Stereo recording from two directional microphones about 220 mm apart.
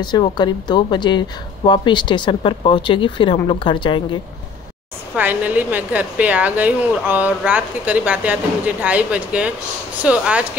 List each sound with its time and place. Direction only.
0.0 s speech: 20° left (ahead or behind)
5.1 s a woman's voice: 5° right (ahead or behind)